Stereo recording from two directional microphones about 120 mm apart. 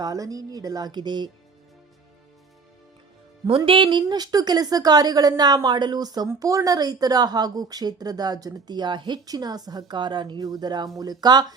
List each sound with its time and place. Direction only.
0.0 s a woman's voice: 30° right (ahead or behind)
3.7 s a woman's voice: 40° right (ahead or behind)